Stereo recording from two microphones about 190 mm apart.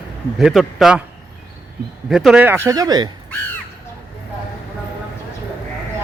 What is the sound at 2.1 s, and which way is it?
A man's voice, 5° right (ahead or behind).